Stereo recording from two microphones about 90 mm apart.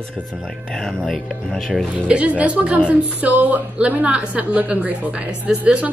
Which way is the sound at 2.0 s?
15° right (ahead or behind).